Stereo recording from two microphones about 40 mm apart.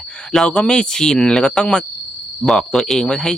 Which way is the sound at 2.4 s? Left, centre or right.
Centre.